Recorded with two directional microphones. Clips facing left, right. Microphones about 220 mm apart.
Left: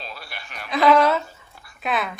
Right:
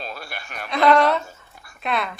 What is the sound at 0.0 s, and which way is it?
Chuckle, 50° right (ahead or behind).